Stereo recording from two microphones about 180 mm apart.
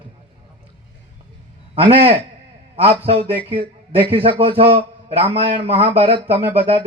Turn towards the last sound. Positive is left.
turn(degrees=-30)  # may be behind; listen again after turning